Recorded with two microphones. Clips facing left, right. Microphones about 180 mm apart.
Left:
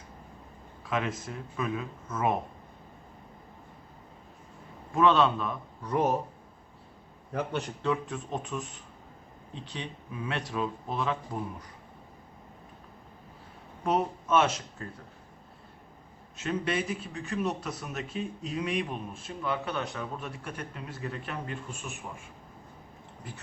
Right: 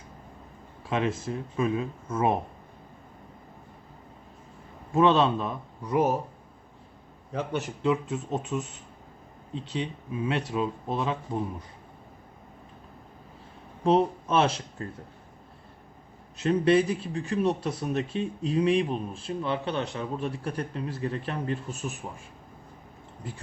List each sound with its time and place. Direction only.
0.9 s speech: 30° right (ahead or behind)
4.9 s speech: 25° right (ahead or behind)
5.8 s speech: 5° right (ahead or behind)
7.9 s speech: 20° right (ahead or behind)
9.7 s speech: 20° right (ahead or behind)
13.8 s speech: 30° right (ahead or behind)
16.4 s a man's voice: 35° right (ahead or behind)